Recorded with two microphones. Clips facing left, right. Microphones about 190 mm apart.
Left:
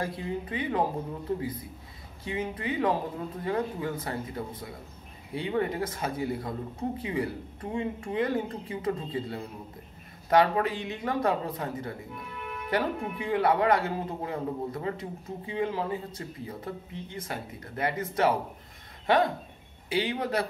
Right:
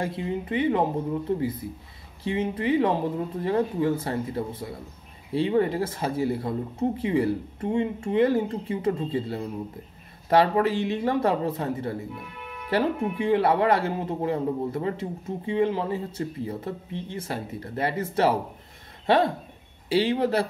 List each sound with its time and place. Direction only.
0.0 s speech: 25° right (ahead or behind)
2.2 s speech: 25° right (ahead or behind)
19.9 s speech: 30° right (ahead or behind)